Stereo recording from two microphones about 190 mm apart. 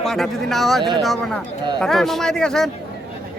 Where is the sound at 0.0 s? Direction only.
Centre (ahead or behind).